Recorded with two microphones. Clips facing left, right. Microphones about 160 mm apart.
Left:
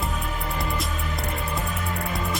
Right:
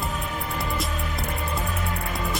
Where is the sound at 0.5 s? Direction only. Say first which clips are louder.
Right 1 dB; centre (ahead or behind).